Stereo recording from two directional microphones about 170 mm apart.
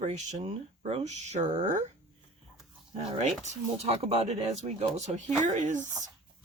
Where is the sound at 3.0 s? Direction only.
40° right (ahead or behind).